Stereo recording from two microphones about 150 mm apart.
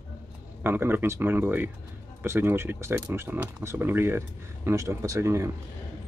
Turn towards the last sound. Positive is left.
turn(degrees=-20)  # may be behind; listen again after turning